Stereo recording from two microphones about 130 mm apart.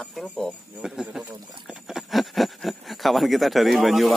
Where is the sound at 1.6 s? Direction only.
5° right (ahead or behind).